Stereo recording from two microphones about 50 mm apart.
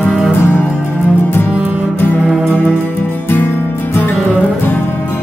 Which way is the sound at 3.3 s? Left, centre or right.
Left.